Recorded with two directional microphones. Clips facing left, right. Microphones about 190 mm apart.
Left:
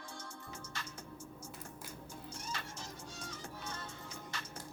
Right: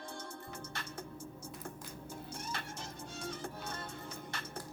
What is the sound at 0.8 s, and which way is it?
Music, 55° right (ahead or behind).